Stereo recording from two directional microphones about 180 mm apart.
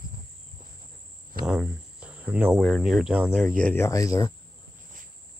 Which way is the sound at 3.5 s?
10° left (ahead or behind).